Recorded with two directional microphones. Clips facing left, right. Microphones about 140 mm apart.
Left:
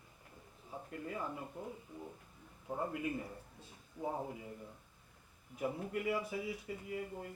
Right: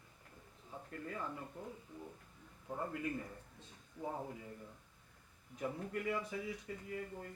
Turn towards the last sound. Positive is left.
turn(degrees=15)  # may be behind; listen again after turning